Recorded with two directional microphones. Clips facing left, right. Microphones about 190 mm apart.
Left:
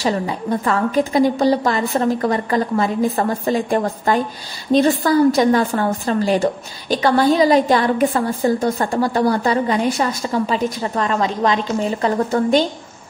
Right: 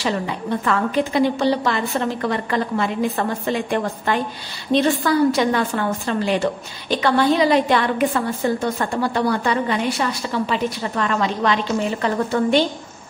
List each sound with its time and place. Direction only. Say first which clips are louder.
0.0 s a woman's voice: left 3 dB; 40° left (ahead or behind)